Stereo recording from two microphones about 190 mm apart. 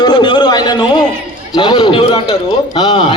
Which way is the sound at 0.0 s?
25° left (ahead or behind).